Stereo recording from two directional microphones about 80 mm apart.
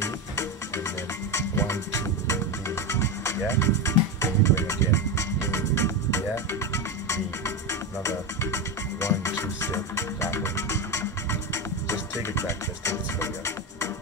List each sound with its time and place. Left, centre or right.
1.3 s music: left